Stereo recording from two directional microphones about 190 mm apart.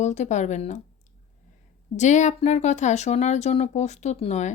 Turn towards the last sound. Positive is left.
turn(degrees=35)  # may be behind; listen again after turning